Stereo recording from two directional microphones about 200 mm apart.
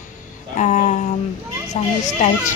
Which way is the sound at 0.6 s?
35° left (ahead or behind).